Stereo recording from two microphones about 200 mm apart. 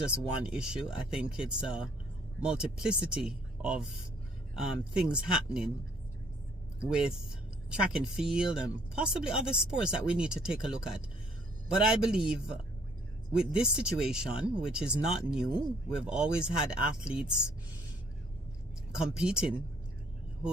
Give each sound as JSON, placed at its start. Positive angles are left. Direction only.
{"t": 0.0, "sound": "speech", "side_deg": -5}
{"t": 6.7, "sound": "speech", "side_deg": -5}
{"t": 18.9, "sound": "speech", "side_deg": -5}